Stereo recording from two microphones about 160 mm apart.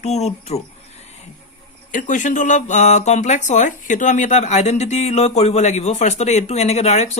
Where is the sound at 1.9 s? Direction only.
55° left (ahead or behind).